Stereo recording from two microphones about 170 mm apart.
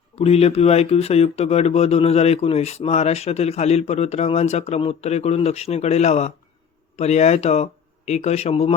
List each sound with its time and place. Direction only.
0.2 s speech: 35° left (ahead or behind)